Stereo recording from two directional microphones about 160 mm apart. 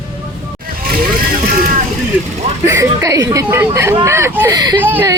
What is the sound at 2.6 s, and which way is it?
Speech, 15° right (ahead or behind).